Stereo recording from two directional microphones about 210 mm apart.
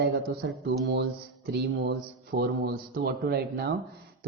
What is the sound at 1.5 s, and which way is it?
A man's voice, 55° right (ahead or behind).